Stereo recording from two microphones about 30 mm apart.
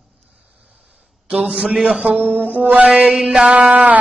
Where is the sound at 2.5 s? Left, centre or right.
Right.